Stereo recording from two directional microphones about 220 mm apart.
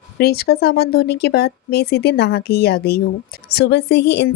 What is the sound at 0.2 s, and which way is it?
Speech, 45° left (ahead or behind).